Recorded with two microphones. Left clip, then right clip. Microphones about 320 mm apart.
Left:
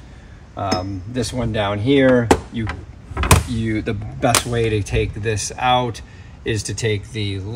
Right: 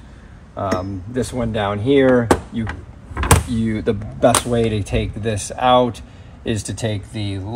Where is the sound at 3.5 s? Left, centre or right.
Centre.